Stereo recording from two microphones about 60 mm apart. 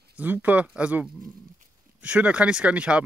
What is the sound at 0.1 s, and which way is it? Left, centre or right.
Speech, right.